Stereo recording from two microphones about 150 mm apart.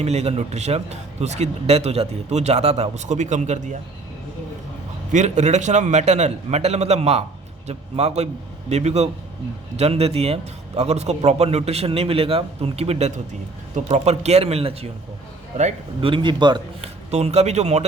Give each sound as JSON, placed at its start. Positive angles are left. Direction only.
{"t": 0.0, "sound": "a man's voice", "side_deg": -45}
{"t": 5.1, "sound": "a man's voice", "side_deg": -50}
{"t": 16.0, "sound": "a man's voice", "side_deg": -35}
{"t": 16.8, "sound": "speech", "side_deg": -45}